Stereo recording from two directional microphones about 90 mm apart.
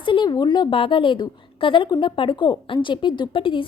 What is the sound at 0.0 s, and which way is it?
A woman's voice, 65° left (ahead or behind).